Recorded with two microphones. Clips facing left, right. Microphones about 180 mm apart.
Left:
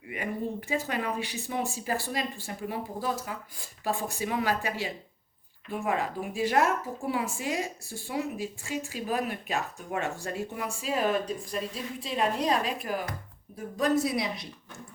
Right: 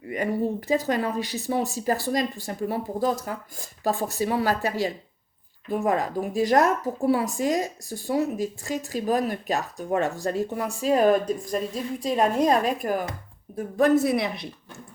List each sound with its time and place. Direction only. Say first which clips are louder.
0.7 s speech: right 6 dB; 40° right (ahead or behind); by 14.4 s 55° right (ahead or behind)